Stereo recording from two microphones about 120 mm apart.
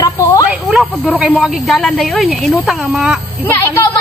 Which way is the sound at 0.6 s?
10° right (ahead or behind).